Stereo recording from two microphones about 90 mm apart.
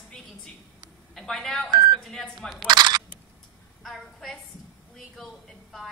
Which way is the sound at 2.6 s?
55° right (ahead or behind).